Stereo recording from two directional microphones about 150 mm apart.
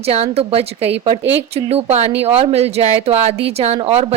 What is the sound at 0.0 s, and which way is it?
Speech, 40° right (ahead or behind).